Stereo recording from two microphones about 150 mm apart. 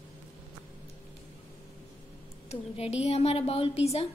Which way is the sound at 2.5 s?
45° left (ahead or behind).